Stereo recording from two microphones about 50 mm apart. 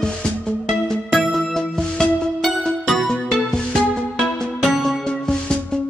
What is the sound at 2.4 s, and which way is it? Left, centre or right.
Music, centre.